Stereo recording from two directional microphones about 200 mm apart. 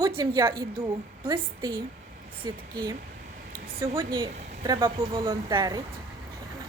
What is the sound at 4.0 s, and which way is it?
A woman's voice, 25° right (ahead or behind).